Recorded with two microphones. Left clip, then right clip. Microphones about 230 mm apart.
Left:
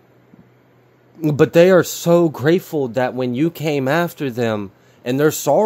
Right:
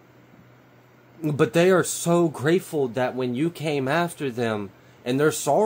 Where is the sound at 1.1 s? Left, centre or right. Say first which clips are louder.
Left 8 dB; left.